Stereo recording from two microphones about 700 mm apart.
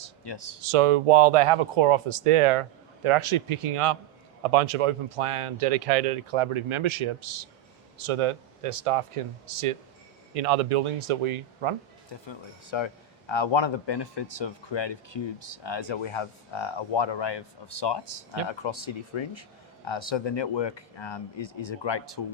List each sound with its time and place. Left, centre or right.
0.3 s a man's voice: left
0.6 s speech: right
12.3 s a man's voice: left